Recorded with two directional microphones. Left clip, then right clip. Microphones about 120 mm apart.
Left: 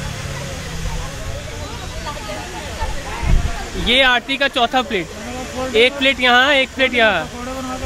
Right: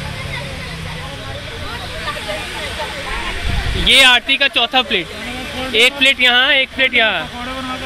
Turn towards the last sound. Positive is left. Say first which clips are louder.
# right 1 dB
turn(degrees=25)  # may be behind; listen again after turning